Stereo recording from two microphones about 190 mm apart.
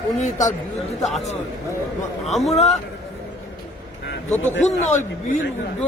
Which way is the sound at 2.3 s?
Centre (ahead or behind).